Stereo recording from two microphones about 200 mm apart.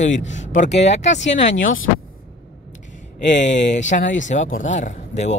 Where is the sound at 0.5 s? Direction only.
35° left (ahead or behind).